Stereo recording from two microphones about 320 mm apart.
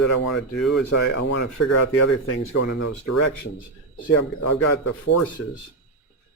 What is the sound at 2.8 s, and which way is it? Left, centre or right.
Speech, left.